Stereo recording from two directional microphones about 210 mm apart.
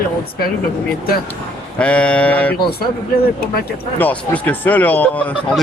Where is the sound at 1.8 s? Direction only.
5° left (ahead or behind).